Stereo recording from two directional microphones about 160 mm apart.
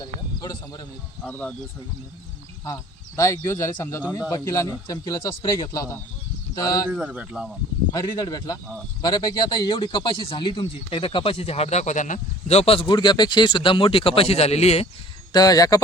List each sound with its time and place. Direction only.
0.0 s a sound: 25° left (ahead or behind)
1.2 s speech: 10° left (ahead or behind)
3.2 s speech: 15° left (ahead or behind)
6.9 s speech: 5° right (ahead or behind)
7.9 s speech: 25° left (ahead or behind); by 14.8 s 40° left (ahead or behind)
15.3 s speech: 25° left (ahead or behind)